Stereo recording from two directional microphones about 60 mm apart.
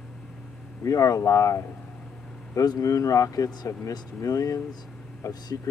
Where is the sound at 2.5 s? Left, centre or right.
Left.